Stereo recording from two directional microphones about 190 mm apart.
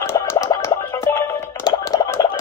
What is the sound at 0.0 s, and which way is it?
Music, 15° left (ahead or behind).